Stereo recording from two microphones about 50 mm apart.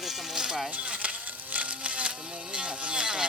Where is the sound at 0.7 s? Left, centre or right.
Right.